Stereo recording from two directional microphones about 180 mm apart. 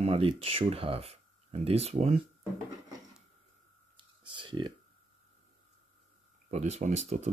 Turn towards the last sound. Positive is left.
turn(degrees=-40)  # may be behind; listen again after turning